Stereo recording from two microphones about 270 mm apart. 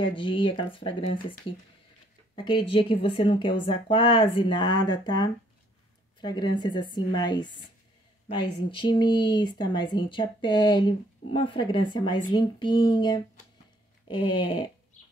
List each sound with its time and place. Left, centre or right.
0.0 s speech: centre
2.3 s speech: centre
8.6 s speech: centre